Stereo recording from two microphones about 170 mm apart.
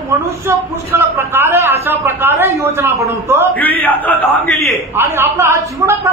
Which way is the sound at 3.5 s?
10° left (ahead or behind).